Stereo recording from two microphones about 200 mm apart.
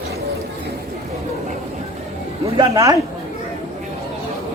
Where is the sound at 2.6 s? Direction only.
15° right (ahead or behind).